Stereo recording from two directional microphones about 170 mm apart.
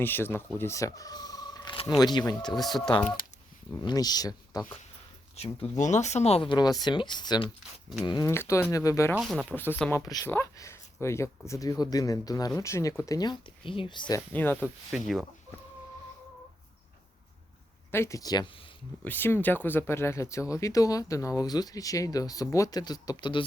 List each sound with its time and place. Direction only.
0.0 s speech: 10° left (ahead or behind)
2.6 s speech: centre (ahead or behind)
3.8 s speech: 20° left (ahead or behind)
5.4 s speech: 40° left (ahead or behind); by 9.1 s 20° left (ahead or behind)
9.1 s speech: 5° right (ahead or behind)
9.5 s speech: 10° left (ahead or behind)
10.1 s speech: 20° left (ahead or behind)
14.3 s speech: 10° left (ahead or behind)
14.6 s speech: centre (ahead or behind)
17.9 s speech: 15° left (ahead or behind)
19.0 s speech: 10° left (ahead or behind)